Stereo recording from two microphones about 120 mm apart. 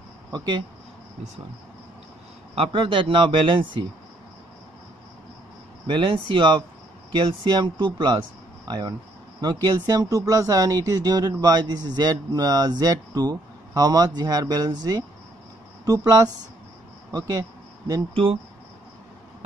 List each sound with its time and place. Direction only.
0.3 s speech: 35° right (ahead or behind)
2.5 s speech: 50° right (ahead or behind)
5.9 s speech: 45° right (ahead or behind)
18.1 s speech: 55° right (ahead or behind)